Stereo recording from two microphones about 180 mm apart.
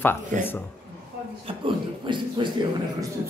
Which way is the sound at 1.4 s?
25° right (ahead or behind).